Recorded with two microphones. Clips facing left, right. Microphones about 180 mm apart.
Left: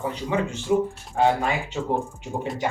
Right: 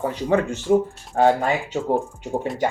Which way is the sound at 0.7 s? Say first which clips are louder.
Right 4 dB; 40° right (ahead or behind).